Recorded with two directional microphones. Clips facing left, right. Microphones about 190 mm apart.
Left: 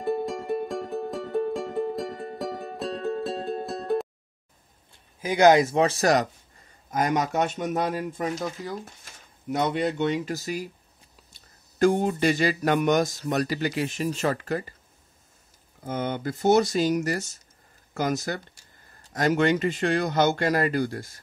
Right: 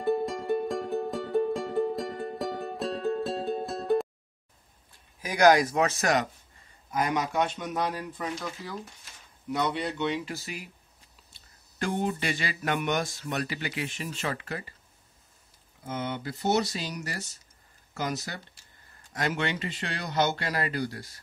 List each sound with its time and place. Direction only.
0.0 s music: centre (ahead or behind)
5.2 s speech: 25° left (ahead or behind)
6.9 s speech: 45° left (ahead or behind)
15.8 s speech: 50° left (ahead or behind)